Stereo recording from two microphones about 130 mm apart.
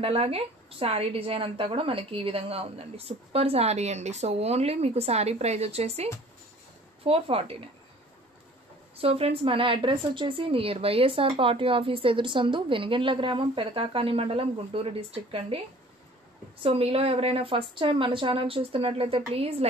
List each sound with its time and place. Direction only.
0.0 s a woman's voice: 50° right (ahead or behind)
7.1 s a woman's voice: 45° right (ahead or behind)
8.9 s a woman's voice: 50° right (ahead or behind)